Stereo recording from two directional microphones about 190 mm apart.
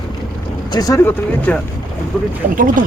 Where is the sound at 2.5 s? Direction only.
45° right (ahead or behind).